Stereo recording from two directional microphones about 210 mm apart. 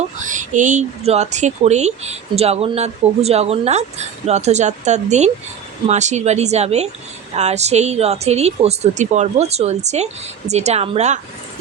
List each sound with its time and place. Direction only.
0.2 s speech: 35° right (ahead or behind)